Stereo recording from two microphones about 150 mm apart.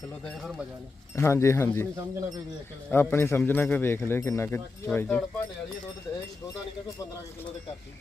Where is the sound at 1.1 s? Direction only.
20° left (ahead or behind).